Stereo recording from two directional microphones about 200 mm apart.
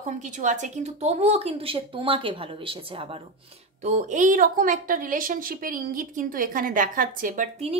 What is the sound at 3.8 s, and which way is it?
A woman's voice, 40° right (ahead or behind).